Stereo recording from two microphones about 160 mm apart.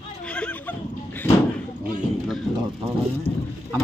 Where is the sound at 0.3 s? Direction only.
10° left (ahead or behind).